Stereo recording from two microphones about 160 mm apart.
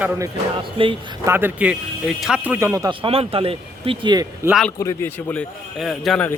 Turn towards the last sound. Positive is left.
turn(degrees=0)  # may be behind; listen again after turning